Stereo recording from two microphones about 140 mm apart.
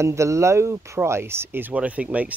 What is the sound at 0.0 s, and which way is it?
Speech, 20° right (ahead or behind).